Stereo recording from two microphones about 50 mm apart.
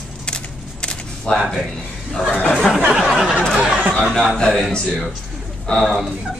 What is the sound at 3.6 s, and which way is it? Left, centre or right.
Chatter, right.